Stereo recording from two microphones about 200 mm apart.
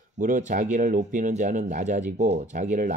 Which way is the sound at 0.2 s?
40° right (ahead or behind).